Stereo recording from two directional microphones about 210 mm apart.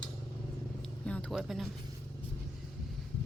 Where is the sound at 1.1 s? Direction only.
5° left (ahead or behind).